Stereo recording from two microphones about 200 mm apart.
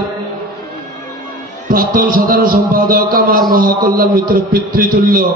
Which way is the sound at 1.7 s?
45° right (ahead or behind).